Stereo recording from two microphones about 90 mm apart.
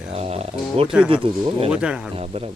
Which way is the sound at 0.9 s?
10° right (ahead or behind).